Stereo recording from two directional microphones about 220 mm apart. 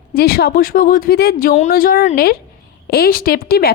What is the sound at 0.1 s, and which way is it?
A woman's voice, 45° left (ahead or behind).